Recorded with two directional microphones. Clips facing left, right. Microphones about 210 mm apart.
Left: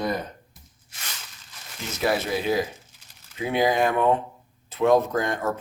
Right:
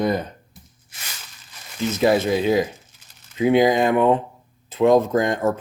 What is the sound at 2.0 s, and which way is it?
Speech, 20° right (ahead or behind).